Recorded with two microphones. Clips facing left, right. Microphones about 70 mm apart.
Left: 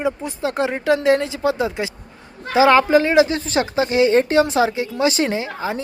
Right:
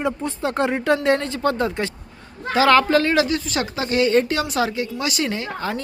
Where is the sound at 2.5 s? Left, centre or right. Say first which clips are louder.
Left 2 dB; centre.